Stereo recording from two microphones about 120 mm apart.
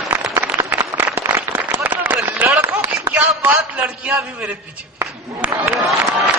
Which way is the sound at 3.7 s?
5° right (ahead or behind).